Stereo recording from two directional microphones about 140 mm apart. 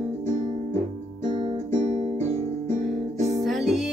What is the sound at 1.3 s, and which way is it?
Guitar, 35° right (ahead or behind).